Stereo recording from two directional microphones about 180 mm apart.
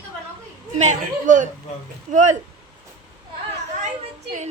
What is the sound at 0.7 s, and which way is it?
Speech, 40° right (ahead or behind).